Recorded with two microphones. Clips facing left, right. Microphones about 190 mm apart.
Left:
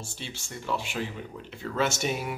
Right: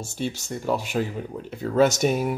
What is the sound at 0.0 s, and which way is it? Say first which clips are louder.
A man's voice: right 11 dB; 45° right (ahead or behind).